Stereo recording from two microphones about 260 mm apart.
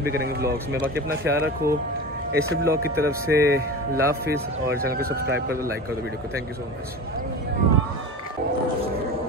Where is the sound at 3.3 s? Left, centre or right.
Right.